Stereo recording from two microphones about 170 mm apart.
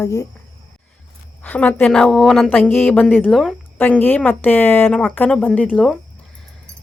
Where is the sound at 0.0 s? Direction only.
20° left (ahead or behind).